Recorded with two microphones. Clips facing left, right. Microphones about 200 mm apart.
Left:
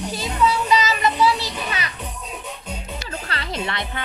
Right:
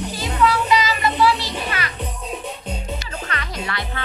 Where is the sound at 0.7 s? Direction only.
20° left (ahead or behind).